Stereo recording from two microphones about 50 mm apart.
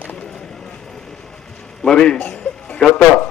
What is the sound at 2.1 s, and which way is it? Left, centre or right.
Music, left.